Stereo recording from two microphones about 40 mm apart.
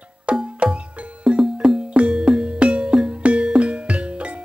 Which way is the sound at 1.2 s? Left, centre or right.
Centre.